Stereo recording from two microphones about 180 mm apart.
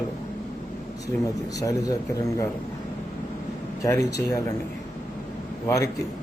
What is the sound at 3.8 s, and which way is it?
Speech, 15° left (ahead or behind).